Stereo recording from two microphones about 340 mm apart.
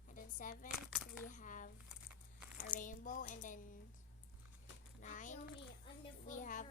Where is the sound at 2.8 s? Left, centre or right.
Left.